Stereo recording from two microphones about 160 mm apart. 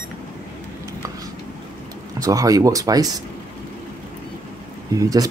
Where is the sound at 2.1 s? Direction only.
20° right (ahead or behind).